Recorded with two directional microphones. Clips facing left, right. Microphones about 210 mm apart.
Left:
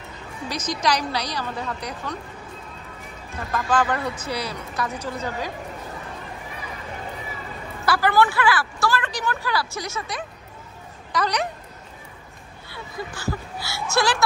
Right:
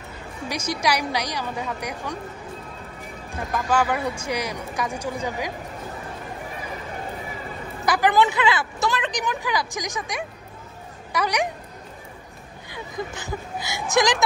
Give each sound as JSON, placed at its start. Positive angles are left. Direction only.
{"t": 0.5, "sound": "a woman's voice", "side_deg": -10}
{"t": 3.3, "sound": "a woman's voice", "side_deg": -15}
{"t": 7.8, "sound": "a woman's voice", "side_deg": -15}
{"t": 12.6, "sound": "speech", "side_deg": -15}